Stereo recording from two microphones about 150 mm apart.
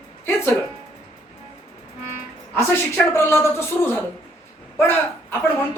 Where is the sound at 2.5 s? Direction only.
15° left (ahead or behind).